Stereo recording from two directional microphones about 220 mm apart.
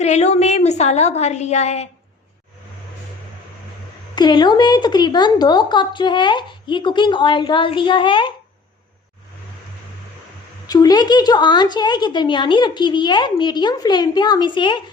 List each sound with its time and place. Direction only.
0.0 s a woman's voice: 30° left (ahead or behind)
4.1 s speech: 20° left (ahead or behind)
10.7 s speech: 15° left (ahead or behind)